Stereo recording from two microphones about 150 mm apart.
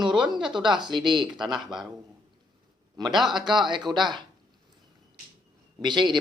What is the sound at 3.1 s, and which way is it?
Speech, 5° right (ahead or behind).